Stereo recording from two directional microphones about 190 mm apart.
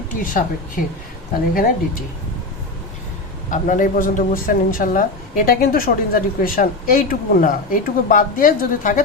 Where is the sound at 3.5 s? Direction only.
45° left (ahead or behind).